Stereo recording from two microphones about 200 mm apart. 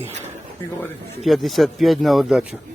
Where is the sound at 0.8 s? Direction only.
Centre (ahead or behind).